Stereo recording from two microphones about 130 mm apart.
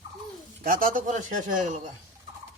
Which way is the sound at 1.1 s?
70° right (ahead or behind).